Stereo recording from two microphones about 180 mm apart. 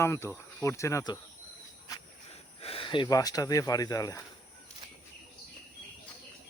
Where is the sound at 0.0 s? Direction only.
15° left (ahead or behind).